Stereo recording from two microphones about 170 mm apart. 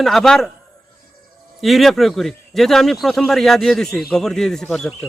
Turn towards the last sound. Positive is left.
turn(degrees=5)  # may be behind; listen again after turning